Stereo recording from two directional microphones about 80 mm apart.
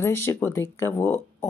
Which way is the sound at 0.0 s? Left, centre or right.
Left.